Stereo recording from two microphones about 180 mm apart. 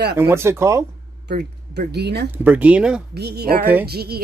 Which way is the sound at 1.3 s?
60° right (ahead or behind).